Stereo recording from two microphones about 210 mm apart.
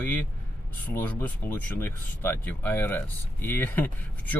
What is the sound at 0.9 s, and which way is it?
Speech, 10° left (ahead or behind).